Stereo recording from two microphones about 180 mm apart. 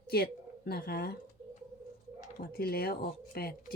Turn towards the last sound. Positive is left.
turn(degrees=55)  # may be behind; listen again after turning